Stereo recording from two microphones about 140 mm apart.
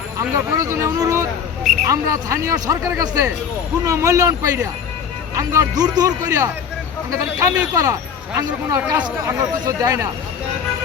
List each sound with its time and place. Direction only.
0.2 s a man's voice: 25° right (ahead or behind)